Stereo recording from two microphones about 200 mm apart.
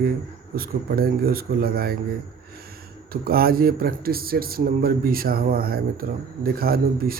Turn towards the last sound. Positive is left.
turn(degrees=-50)  # may be behind; listen again after turning